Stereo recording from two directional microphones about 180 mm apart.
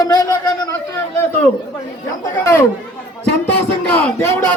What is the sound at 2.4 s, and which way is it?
Chatter, 15° left (ahead or behind).